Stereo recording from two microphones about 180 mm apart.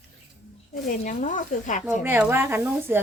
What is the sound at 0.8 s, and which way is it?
Speech, 45° left (ahead or behind).